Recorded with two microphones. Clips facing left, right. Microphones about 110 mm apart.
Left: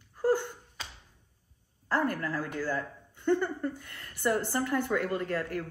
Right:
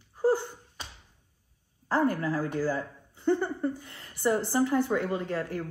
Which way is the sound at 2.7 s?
5° right (ahead or behind).